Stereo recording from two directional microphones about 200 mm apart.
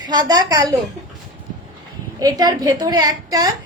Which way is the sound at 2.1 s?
20° right (ahead or behind).